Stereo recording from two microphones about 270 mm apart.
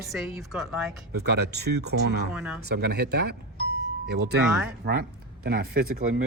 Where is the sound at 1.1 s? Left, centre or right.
Right.